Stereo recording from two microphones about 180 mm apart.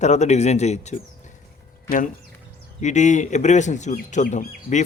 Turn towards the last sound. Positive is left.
turn(degrees=45)  # may be behind; listen again after turning